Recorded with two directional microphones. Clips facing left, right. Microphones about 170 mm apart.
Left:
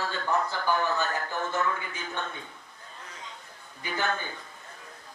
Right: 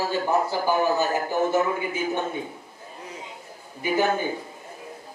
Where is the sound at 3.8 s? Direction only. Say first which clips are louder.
Right 8 dB; 15° right (ahead or behind).